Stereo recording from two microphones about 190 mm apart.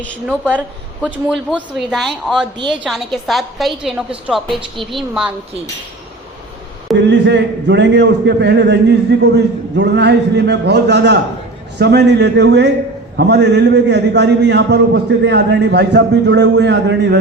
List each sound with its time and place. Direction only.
1.0 s a woman's voice: 5° right (ahead or behind)
6.9 s a man's voice: 70° right (ahead or behind)